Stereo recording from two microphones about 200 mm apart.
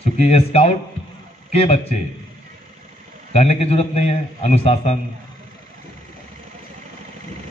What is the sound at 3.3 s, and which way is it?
A man's voice, 30° left (ahead or behind).